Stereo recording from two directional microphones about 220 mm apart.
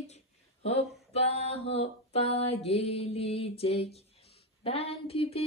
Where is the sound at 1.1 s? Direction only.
25° left (ahead or behind).